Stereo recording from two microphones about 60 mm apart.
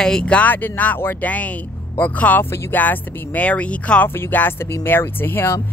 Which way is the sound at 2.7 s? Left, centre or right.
Left.